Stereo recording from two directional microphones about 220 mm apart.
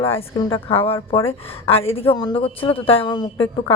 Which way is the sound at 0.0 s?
25° left (ahead or behind).